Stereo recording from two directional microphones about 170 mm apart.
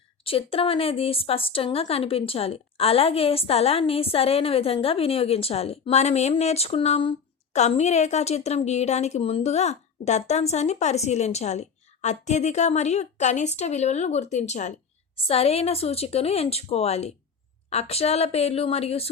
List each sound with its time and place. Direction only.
0.3 s a woman's voice: 35° left (ahead or behind)